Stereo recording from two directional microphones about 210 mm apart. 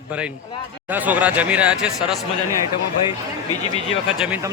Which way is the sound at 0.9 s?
10° right (ahead or behind).